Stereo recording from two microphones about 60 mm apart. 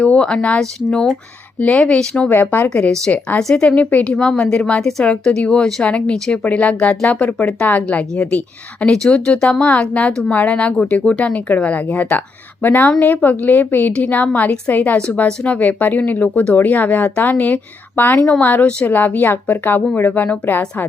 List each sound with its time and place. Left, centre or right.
0.0 s a woman's voice: centre
1.5 s a woman's voice: left
1.8 s speech: centre
2.3 s speech: left
2.6 s a woman's voice: left
10.1 s a woman's voice: centre; by 20.6 s left